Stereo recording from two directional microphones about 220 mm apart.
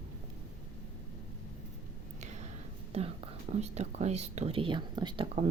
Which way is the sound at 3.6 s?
30° right (ahead or behind).